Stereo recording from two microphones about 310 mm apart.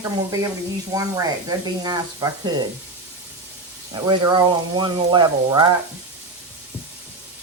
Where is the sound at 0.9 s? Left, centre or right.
Centre.